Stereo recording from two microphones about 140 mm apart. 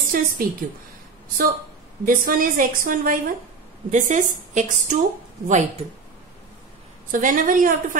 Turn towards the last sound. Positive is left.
turn(degrees=-70)  # may be behind; listen again after turning